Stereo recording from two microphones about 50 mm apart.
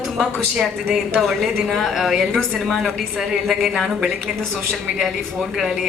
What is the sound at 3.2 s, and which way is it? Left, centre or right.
Speech, centre.